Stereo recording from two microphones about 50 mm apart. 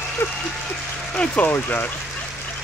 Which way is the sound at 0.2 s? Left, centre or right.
Left.